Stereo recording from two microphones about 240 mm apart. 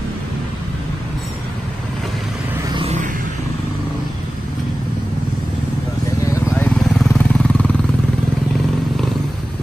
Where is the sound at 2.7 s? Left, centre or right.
Right.